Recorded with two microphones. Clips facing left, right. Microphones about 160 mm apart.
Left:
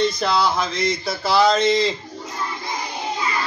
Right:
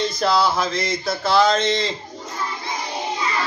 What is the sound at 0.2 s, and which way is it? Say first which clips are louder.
Speech: right 1 dB; centre (ahead or behind).